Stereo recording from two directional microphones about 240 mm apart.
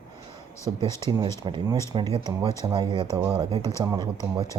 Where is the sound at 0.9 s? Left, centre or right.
Centre.